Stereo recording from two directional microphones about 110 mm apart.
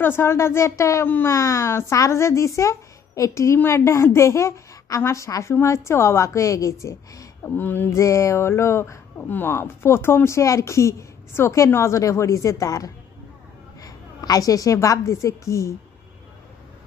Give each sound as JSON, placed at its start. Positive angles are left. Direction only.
{"t": 0.0, "sound": "a woman's voice", "side_deg": 20}